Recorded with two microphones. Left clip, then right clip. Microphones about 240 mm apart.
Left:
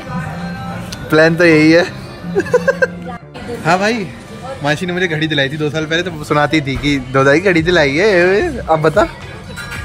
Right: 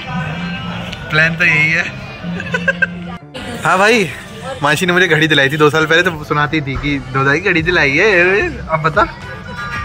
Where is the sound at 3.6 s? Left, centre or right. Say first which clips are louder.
Right 4 dB; centre.